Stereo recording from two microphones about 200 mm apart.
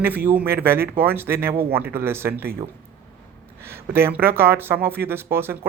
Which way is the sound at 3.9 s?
10° right (ahead or behind).